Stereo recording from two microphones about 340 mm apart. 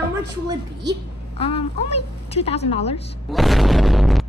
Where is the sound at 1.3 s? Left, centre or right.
Centre.